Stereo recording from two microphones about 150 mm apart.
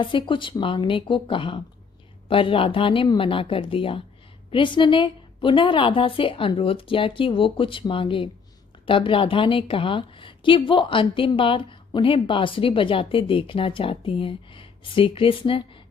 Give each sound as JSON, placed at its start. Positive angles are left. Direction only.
{"t": 0.0, "sound": "a woman's voice", "side_deg": 35}